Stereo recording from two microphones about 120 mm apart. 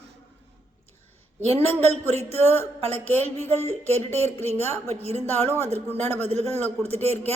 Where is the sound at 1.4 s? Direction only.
60° right (ahead or behind).